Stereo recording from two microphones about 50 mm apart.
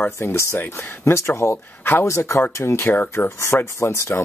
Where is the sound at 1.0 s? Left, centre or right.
Left.